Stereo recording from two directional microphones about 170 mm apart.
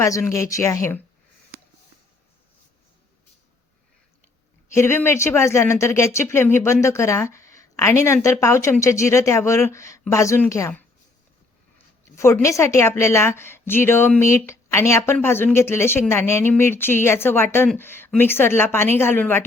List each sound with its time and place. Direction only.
0.0 s a woman's voice: 15° left (ahead or behind)
4.7 s a woman's voice: 15° left (ahead or behind)
12.1 s a woman's voice: 15° left (ahead or behind)